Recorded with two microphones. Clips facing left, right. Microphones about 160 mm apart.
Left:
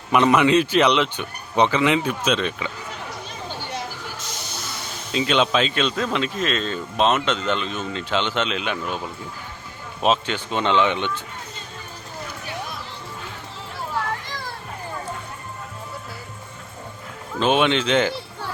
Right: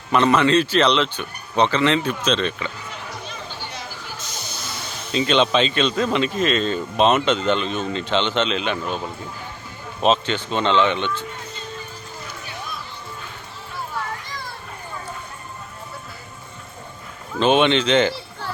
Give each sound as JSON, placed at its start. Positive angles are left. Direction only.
{"t": 0.1, "sound": "speech", "side_deg": 15}
{"t": 5.1, "sound": "speech", "side_deg": 5}
{"t": 10.0, "sound": "speech", "side_deg": 10}
{"t": 17.4, "sound": "speech", "side_deg": 5}